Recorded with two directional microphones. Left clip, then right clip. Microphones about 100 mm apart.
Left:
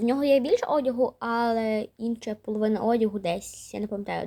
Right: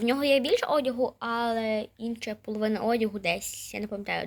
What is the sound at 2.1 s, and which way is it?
A woman's voice, 50° left (ahead or behind).